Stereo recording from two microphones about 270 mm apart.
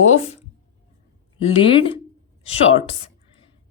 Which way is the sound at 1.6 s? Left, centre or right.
Centre.